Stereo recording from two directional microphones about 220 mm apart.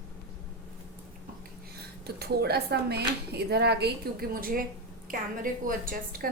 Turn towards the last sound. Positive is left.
turn(degrees=-40)  # may be behind; listen again after turning